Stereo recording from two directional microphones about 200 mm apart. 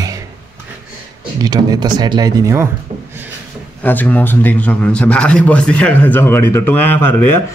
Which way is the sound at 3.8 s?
10° left (ahead or behind).